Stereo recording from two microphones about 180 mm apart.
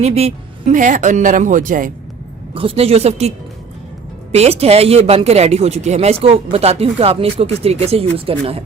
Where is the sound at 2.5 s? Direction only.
30° right (ahead or behind).